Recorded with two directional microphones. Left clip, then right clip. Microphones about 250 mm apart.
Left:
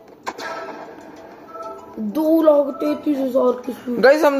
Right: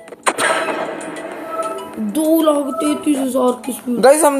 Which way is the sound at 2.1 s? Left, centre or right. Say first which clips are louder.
Even; right.